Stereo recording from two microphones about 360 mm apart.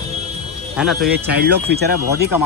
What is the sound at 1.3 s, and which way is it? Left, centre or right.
Speech, right.